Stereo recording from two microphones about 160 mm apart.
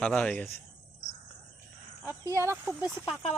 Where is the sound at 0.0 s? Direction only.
5° left (ahead or behind).